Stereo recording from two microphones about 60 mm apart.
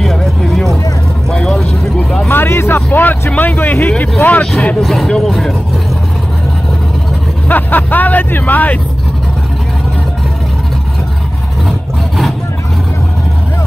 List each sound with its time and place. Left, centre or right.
0.0 s a sound: centre
1.3 s vehicle: centre
2.2 s vehicle: left
2.9 s vehicle: left
4.2 s speech: left
4.8 s speech: centre
7.4 s speech: left